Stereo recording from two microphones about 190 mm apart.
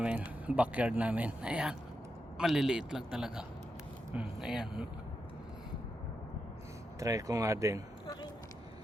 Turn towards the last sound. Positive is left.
turn(degrees=-15)  # may be behind; listen again after turning